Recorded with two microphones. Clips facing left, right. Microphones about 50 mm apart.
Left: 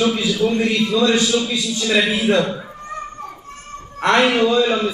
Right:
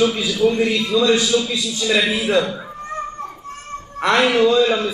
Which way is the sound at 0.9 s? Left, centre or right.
Centre.